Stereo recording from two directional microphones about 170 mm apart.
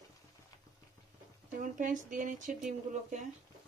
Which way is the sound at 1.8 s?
50° right (ahead or behind).